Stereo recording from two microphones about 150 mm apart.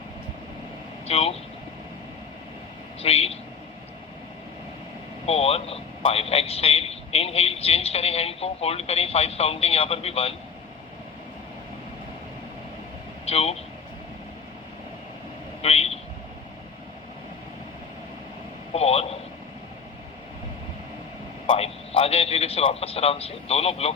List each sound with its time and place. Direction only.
1.0 s a man's voice: 40° left (ahead or behind)
3.0 s a man's voice: 40° left (ahead or behind)
5.2 s a man's voice: 40° left (ahead or behind)
13.2 s speech: 40° left (ahead or behind)
15.6 s speech: 40° left (ahead or behind)
18.7 s a man's voice: 40° left (ahead or behind)
21.4 s a man's voice: 35° left (ahead or behind)